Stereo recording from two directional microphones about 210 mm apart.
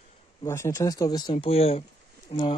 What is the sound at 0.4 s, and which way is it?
Speech, 15° left (ahead or behind).